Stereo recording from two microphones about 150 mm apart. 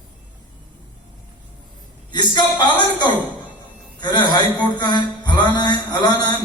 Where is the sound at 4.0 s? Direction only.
30° left (ahead or behind).